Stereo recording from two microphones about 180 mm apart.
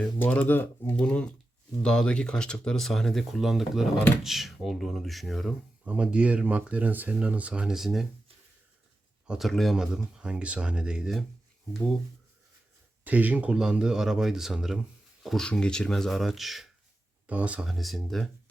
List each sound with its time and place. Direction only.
0.0 s speech: 10° left (ahead or behind)
9.2 s speech: 5° right (ahead or behind)
13.1 s speech: 10° right (ahead or behind)